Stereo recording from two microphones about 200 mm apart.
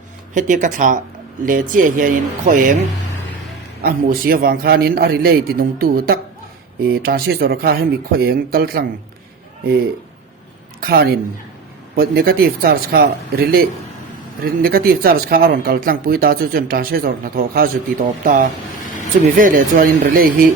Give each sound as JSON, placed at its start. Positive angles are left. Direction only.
{"t": 0.3, "sound": "speech", "side_deg": -40}
{"t": 3.8, "sound": "speech", "side_deg": -45}
{"t": 10.8, "sound": "a woman's voice", "side_deg": -50}